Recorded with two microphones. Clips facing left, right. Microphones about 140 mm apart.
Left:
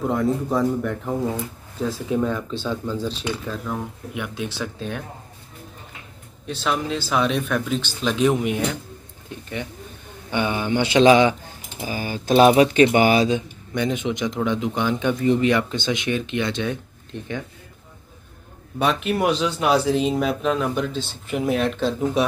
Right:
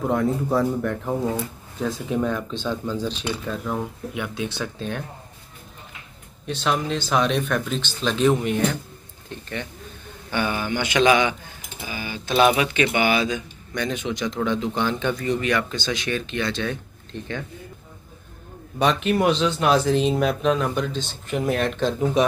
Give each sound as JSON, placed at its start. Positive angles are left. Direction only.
{"t": 0.1, "sound": "speech", "side_deg": 0}
{"t": 6.4, "sound": "speech", "side_deg": 0}
{"t": 10.3, "sound": "speech", "side_deg": 20}
{"t": 13.7, "sound": "speech", "side_deg": 20}
{"t": 18.8, "sound": "speech", "side_deg": 5}